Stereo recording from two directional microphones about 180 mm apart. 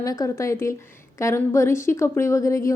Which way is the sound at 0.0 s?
20° left (ahead or behind).